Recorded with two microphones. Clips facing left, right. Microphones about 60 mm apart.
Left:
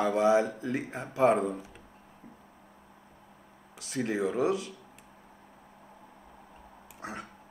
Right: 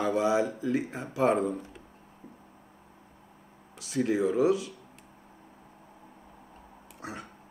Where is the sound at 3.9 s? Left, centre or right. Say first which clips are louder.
Right 4 dB; centre.